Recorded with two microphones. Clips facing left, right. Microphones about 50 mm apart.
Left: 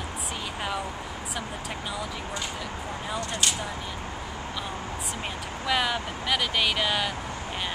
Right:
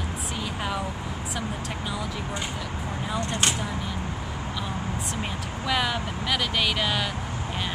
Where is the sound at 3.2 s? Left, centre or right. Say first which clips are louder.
Right 3 dB; right.